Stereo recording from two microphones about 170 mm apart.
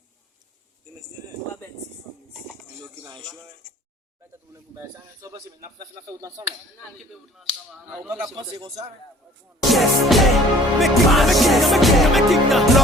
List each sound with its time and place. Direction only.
5.2 s speech: 20° right (ahead or behind)
7.0 s speech: centre (ahead or behind)
8.4 s a man's voice: 30° right (ahead or behind)
9.7 s music: centre (ahead or behind)